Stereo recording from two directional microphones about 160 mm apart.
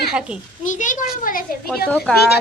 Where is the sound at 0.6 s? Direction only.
50° left (ahead or behind).